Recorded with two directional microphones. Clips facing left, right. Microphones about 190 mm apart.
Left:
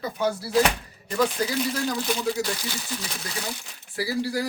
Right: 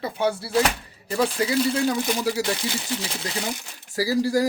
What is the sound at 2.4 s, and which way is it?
Speech, 25° right (ahead or behind).